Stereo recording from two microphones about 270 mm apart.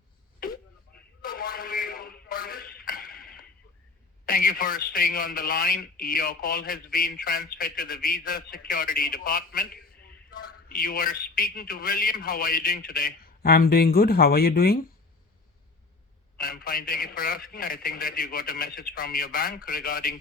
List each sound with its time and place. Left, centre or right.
1.2 s a sound: left
4.3 s a man's voice: left
16.4 s a man's voice: left